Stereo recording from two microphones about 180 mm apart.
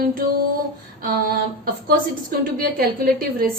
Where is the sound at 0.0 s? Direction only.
50° right (ahead or behind).